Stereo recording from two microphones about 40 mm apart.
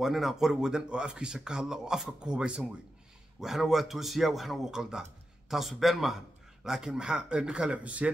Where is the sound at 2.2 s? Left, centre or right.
Right.